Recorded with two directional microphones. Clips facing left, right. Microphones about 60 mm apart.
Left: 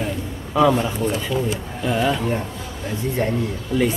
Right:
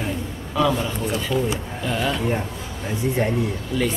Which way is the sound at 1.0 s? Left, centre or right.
Centre.